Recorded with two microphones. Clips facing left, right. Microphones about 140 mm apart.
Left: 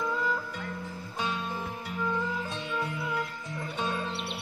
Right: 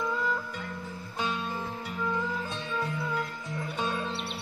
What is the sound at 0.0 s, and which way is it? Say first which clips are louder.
Music: even; centre (ahead or behind).